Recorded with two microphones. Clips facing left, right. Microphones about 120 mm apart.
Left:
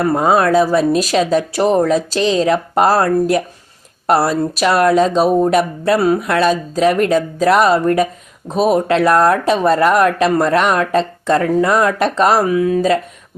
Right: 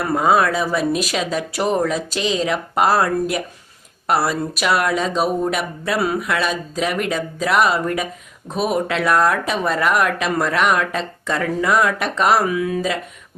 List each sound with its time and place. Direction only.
0.1 s speech: 35° left (ahead or behind)